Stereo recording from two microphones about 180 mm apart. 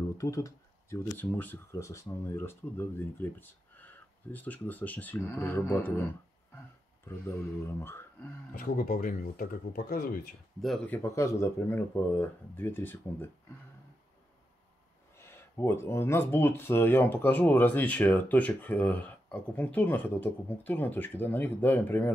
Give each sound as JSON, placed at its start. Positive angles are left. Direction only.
{"t": 0.2, "sound": "speech", "side_deg": 20}
{"t": 7.1, "sound": "speech", "side_deg": 15}
{"t": 8.5, "sound": "speech", "side_deg": 50}
{"t": 10.6, "sound": "speech", "side_deg": 0}
{"t": 11.0, "sound": "speech", "side_deg": 15}
{"t": 15.1, "sound": "speech", "side_deg": 15}